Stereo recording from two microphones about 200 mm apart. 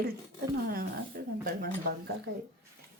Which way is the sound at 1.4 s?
50° right (ahead or behind).